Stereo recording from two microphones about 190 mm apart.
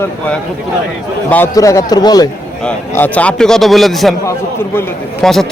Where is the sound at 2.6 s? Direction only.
10° left (ahead or behind).